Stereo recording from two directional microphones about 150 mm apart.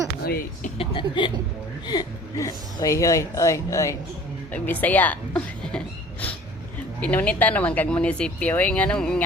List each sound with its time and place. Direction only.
0.3 s speech: 70° left (ahead or behind)
0.8 s speech: 35° left (ahead or behind); by 9.2 s 5° left (ahead or behind)